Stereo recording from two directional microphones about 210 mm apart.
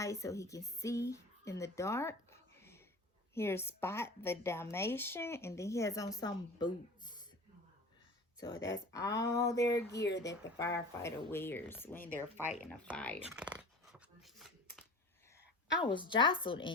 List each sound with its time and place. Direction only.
0.0 s a woman's voice: 15° left (ahead or behind)
8.4 s a woman's voice: 15° left (ahead or behind)
10.0 s speech: 55° left (ahead or behind)
10.2 s a woman's voice: 15° left (ahead or behind)
12.0 s speech: 40° left (ahead or behind)
12.6 s a woman's voice: 5° left (ahead or behind)
13.3 s dog: 5° right (ahead or behind)
15.8 s speech: 25° left (ahead or behind)